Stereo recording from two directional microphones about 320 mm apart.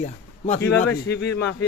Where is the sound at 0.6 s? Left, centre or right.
Centre.